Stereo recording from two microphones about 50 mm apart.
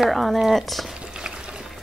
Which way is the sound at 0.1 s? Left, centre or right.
Centre.